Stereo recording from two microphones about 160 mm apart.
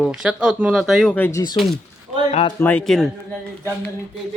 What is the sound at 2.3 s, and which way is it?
Speech, 35° left (ahead or behind).